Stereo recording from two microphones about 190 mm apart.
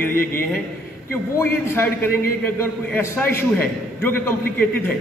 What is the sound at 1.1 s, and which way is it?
A man's voice, 15° left (ahead or behind).